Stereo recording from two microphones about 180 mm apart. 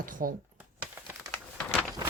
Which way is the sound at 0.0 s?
50° right (ahead or behind).